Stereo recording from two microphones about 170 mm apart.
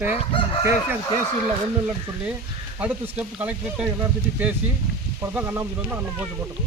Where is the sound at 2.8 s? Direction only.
10° right (ahead or behind).